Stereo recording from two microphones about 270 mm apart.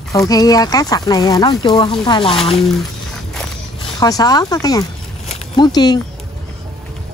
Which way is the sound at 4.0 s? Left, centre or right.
Centre.